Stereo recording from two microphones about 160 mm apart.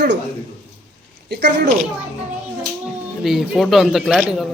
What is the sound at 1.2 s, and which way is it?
Speech, 90° right.